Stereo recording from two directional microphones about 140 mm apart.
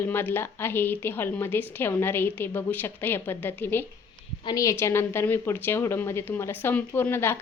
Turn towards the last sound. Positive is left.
turn(degrees=15)  # may be behind; listen again after turning